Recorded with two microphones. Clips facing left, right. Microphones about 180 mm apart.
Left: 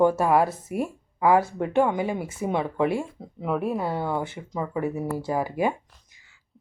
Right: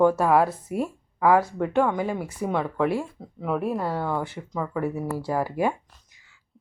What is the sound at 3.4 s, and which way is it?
Speech, centre (ahead or behind).